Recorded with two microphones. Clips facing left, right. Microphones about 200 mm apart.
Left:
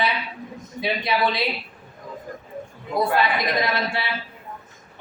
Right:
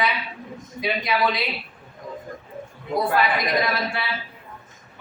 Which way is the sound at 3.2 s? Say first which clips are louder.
Even; 25° left (ahead or behind).